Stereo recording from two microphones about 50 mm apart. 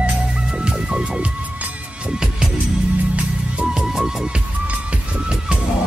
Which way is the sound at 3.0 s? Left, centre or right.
Right.